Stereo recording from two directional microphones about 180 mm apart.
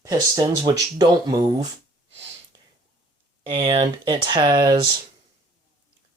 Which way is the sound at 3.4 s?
30° right (ahead or behind).